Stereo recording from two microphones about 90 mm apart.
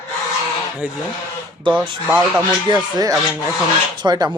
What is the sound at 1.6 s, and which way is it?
Speech, 65° right (ahead or behind).